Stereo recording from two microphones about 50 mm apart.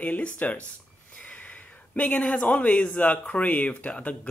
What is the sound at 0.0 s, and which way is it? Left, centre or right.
Speech, left.